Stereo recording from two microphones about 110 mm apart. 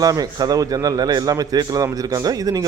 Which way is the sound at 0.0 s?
35° right (ahead or behind).